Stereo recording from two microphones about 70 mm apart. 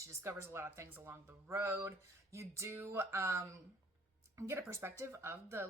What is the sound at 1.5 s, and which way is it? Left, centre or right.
Music, right.